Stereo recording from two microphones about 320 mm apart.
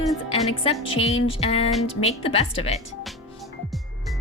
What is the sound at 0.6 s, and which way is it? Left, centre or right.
A woman's voice, centre.